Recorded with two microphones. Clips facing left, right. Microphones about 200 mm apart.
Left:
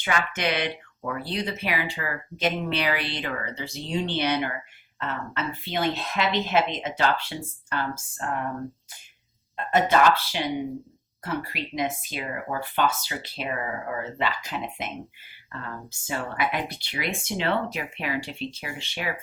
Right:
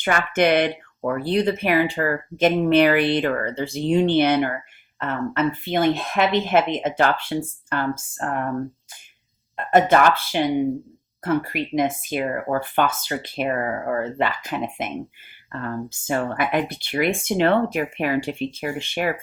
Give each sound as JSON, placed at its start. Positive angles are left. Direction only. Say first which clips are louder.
{"t": 0.0, "sound": "speech", "louder": "right 7 dB", "side_deg": -50}
{"t": 9.7, "sound": "speech", "louder": "right 4 dB", "side_deg": -55}
{"t": 15.9, "sound": "speech", "louder": "right 6 dB", "side_deg": -50}